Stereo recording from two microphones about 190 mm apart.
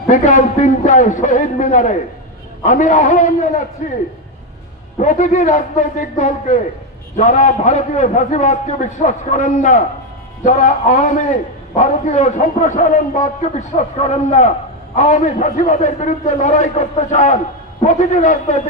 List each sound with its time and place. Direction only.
0.1 s a man's voice: 40° left (ahead or behind)